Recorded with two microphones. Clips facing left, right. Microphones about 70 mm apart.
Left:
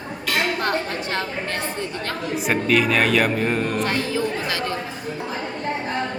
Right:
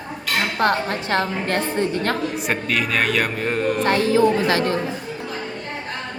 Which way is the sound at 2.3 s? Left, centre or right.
Centre.